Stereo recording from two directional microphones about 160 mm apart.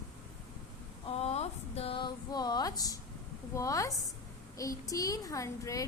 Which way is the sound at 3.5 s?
20° left (ahead or behind).